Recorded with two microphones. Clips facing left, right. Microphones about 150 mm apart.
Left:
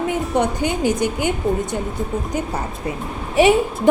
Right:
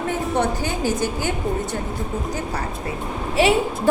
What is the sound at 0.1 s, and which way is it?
A woman's voice, 15° left (ahead or behind).